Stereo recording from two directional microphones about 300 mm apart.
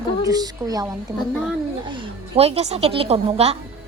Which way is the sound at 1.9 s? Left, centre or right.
Centre.